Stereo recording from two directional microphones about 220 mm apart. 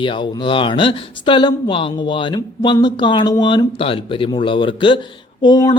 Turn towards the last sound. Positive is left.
turn(degrees=20)  # may be behind; listen again after turning